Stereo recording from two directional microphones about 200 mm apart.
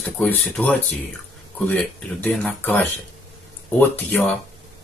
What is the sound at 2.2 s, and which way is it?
Speech, 10° left (ahead or behind).